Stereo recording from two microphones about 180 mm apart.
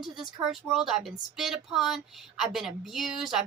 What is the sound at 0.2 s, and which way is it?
Speech, centre (ahead or behind).